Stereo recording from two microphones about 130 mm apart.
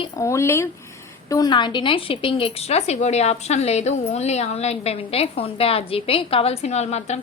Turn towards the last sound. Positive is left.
turn(degrees=60)  # may be behind; listen again after turning